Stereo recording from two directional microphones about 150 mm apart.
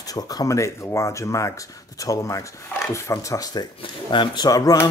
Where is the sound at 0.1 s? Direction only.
25° left (ahead or behind).